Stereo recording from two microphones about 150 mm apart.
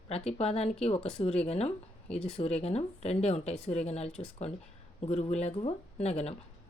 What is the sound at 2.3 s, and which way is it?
Speech, 45° left (ahead or behind).